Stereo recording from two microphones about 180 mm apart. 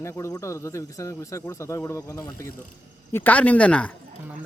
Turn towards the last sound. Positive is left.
turn(degrees=5)  # may be behind; listen again after turning